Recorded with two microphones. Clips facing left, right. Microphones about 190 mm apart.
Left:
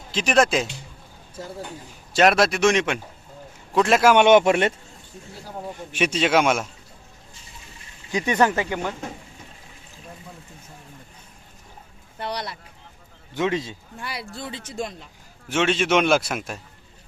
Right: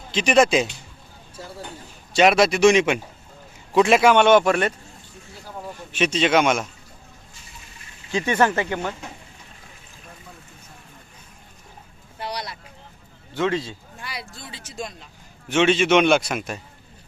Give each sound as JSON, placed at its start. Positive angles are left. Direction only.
{"t": 0.1, "sound": "a man's voice", "side_deg": 0}
{"t": 2.1, "sound": "a man's voice", "side_deg": 0}
{"t": 4.1, "sound": "speech", "side_deg": 15}
{"t": 5.6, "sound": "a man's voice", "side_deg": 10}
{"t": 8.1, "sound": "a man's voice", "side_deg": 15}
{"t": 13.3, "sound": "a man's voice", "side_deg": 20}
{"t": 15.4, "sound": "a man's voice", "side_deg": 0}